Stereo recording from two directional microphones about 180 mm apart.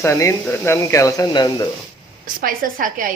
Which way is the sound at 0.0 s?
15° left (ahead or behind).